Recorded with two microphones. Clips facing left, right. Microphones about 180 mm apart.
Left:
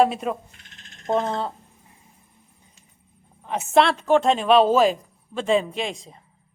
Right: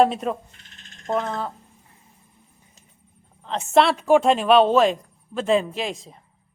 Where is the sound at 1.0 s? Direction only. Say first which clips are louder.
Left 2 dB; 25° left (ahead or behind).